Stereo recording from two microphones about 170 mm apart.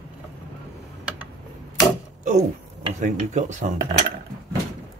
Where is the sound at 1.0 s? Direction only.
5° right (ahead or behind).